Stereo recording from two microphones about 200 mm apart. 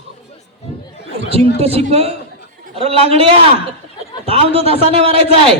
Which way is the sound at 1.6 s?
30° right (ahead or behind).